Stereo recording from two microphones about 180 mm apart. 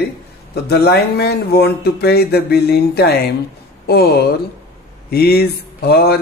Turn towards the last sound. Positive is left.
turn(degrees=60)  # may be behind; listen again after turning